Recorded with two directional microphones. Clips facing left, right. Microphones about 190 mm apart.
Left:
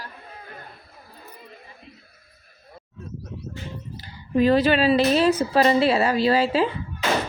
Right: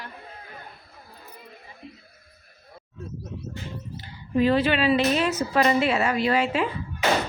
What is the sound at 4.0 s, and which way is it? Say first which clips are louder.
A woman's voice: left 2 dB; 40° left (ahead or behind).